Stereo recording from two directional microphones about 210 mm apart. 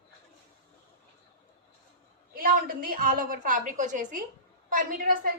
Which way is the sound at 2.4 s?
40° right (ahead or behind).